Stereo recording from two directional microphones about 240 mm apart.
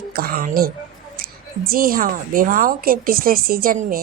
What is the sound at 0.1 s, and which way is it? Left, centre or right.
Speech, right.